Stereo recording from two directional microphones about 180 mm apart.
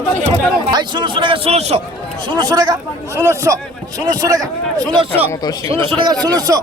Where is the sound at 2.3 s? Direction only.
20° right (ahead or behind).